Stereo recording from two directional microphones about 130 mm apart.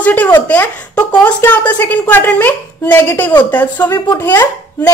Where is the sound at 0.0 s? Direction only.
10° left (ahead or behind).